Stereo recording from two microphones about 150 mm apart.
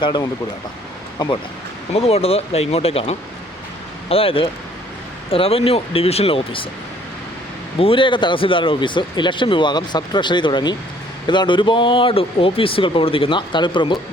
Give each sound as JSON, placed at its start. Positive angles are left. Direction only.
{"t": 0.0, "sound": "speech", "side_deg": 30}
{"t": 1.9, "sound": "speech", "side_deg": 40}
{"t": 7.8, "sound": "speech", "side_deg": 35}